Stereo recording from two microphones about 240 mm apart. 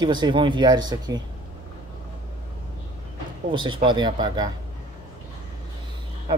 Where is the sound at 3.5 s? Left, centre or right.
Centre.